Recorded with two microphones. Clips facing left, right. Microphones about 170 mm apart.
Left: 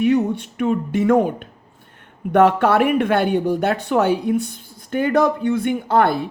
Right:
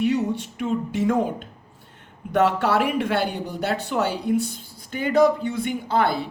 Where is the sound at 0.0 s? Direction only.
55° left (ahead or behind).